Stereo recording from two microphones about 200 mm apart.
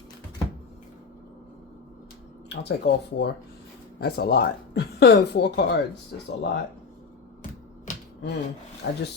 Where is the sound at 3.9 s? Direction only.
50° left (ahead or behind).